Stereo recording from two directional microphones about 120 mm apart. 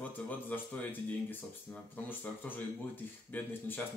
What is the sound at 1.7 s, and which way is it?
Speech, 15° left (ahead or behind).